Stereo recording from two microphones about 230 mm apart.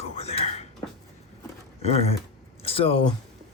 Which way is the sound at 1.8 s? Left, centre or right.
Left.